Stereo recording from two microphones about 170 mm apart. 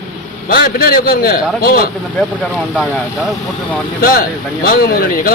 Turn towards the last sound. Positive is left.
turn(degrees=60)  # may be behind; listen again after turning